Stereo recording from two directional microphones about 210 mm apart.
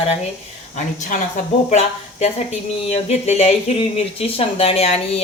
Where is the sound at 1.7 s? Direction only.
30° left (ahead or behind).